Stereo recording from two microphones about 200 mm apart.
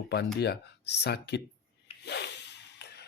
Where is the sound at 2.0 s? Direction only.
55° left (ahead or behind).